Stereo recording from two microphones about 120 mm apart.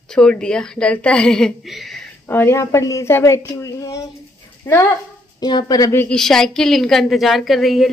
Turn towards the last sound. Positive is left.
turn(degrees=0)  # may be behind; listen again after turning